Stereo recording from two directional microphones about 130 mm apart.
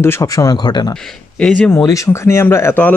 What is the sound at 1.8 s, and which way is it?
Speech, 25° left (ahead or behind).